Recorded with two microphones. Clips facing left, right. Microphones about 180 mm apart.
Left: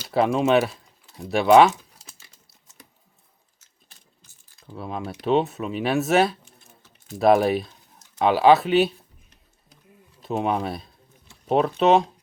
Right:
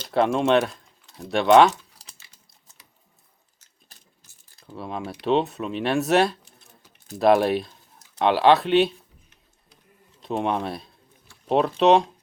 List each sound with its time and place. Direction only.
0.0 s speech: 5° left (ahead or behind)
1.7 s crumpling: 35° right (ahead or behind)
4.6 s speech: centre (ahead or behind)
10.2 s speech: centre (ahead or behind)